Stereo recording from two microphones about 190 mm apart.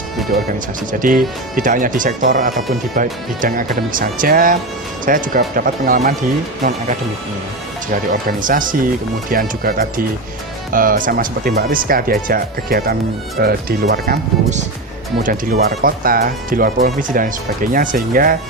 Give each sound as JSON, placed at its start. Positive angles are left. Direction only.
{"t": 0.9, "sound": "speech", "side_deg": -45}
{"t": 6.6, "sound": "speech", "side_deg": -40}
{"t": 8.1, "sound": "speech", "side_deg": -45}